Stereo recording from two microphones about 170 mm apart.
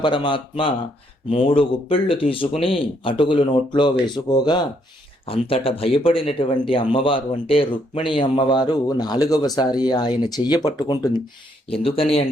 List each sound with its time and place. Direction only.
0.0 s speech: 30° left (ahead or behind)